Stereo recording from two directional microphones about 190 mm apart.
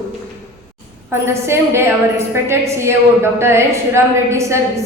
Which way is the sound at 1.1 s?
15° right (ahead or behind).